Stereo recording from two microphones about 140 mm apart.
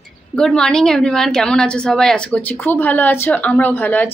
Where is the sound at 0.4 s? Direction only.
5° left (ahead or behind).